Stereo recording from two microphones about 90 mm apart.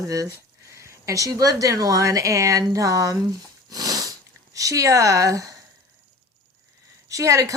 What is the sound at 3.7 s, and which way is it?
Sniff, 40° right (ahead or behind).